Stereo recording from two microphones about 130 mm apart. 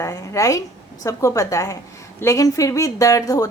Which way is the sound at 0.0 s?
25° left (ahead or behind).